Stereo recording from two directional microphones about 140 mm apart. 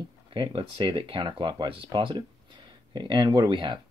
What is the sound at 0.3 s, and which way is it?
Speech, 35° right (ahead or behind).